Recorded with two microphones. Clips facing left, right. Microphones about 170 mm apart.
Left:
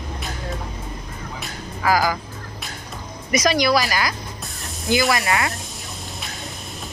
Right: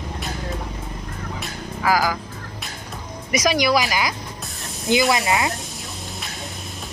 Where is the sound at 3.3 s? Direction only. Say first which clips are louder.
Left 1 dB; 10° right (ahead or behind).